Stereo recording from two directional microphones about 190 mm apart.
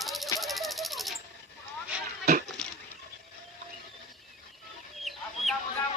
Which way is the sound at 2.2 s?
55° right (ahead or behind).